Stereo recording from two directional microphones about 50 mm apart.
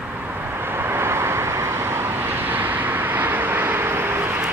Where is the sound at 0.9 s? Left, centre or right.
Right.